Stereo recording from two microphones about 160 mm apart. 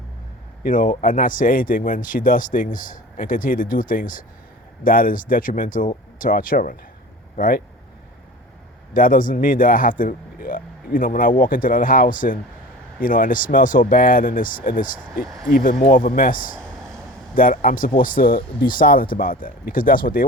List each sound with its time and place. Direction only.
0.6 s speech: 55° left (ahead or behind)
8.9 s speech: 60° left (ahead or behind)